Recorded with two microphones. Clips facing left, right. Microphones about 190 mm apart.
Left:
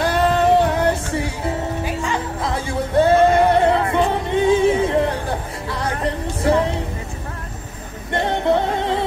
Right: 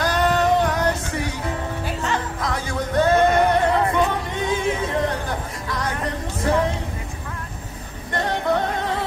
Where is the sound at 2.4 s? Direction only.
30° left (ahead or behind).